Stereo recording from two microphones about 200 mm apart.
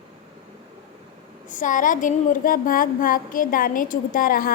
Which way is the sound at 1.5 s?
40° left (ahead or behind).